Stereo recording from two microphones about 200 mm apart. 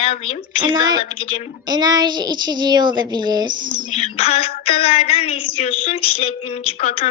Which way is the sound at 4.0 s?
30° left (ahead or behind).